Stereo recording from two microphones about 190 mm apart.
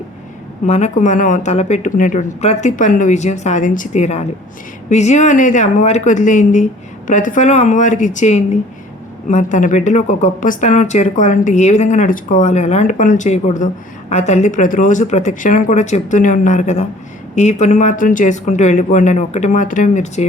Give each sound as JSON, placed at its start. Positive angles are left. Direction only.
{"t": 0.7, "sound": "a woman's voice", "side_deg": 40}